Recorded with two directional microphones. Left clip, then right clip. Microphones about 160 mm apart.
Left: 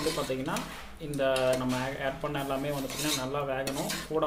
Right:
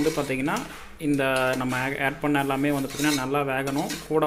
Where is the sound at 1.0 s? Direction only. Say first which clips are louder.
Right 5 dB; 45° right (ahead or behind).